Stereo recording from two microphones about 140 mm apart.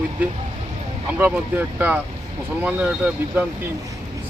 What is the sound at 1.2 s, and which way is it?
Speech, 10° right (ahead or behind).